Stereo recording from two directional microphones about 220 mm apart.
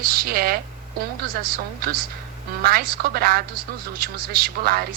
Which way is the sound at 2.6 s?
45° right (ahead or behind).